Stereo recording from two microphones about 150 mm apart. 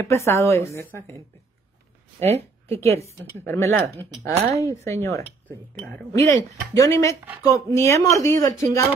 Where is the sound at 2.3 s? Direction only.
45° right (ahead or behind).